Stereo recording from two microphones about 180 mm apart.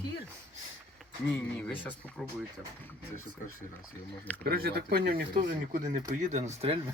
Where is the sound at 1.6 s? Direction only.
10° left (ahead or behind).